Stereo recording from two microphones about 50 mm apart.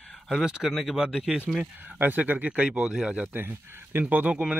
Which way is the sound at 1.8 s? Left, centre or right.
Right.